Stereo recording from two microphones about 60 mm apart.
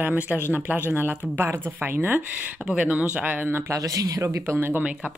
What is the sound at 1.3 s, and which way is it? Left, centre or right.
A woman's voice, right.